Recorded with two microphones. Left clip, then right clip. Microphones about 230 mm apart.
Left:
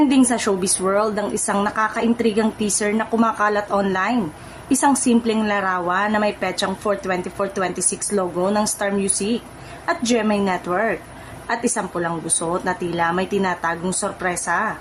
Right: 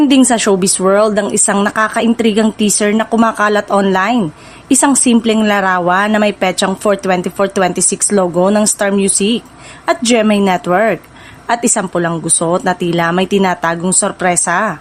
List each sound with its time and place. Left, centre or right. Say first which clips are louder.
0.1 s a woman's voice: right 8 dB; right